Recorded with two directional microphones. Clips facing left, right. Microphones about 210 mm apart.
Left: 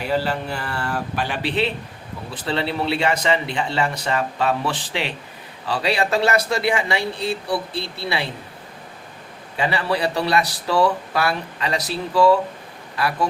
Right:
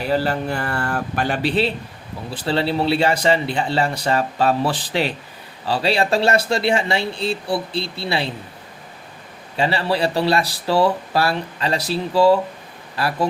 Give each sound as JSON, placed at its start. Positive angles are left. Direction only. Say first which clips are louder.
{"t": 0.1, "sound": "speech", "louder": "right 3 dB", "side_deg": -50}
{"t": 9.6, "sound": "speech", "louder": "right 2 dB", "side_deg": -30}